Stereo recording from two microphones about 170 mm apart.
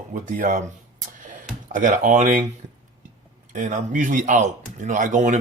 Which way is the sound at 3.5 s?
50° right (ahead or behind).